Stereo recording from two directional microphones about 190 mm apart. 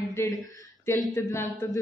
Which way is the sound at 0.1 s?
15° left (ahead or behind).